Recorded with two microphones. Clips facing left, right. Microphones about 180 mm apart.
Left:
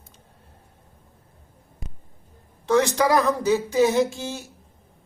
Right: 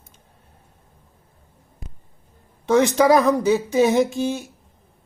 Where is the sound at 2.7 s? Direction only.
20° right (ahead or behind).